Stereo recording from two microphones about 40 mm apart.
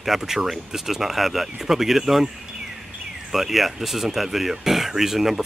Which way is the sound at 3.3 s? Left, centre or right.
Centre.